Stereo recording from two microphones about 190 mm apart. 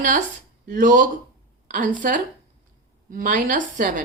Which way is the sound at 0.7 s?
45° right (ahead or behind).